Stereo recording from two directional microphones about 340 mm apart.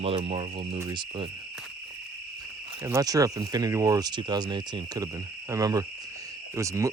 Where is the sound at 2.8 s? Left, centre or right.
Centre.